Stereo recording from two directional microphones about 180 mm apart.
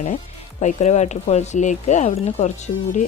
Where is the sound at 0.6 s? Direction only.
40° left (ahead or behind).